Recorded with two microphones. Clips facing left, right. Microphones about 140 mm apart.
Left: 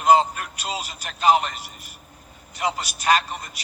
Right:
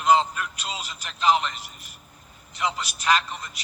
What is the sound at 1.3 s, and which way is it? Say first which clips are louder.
A man's voice: left 3 dB; 40° left (ahead or behind).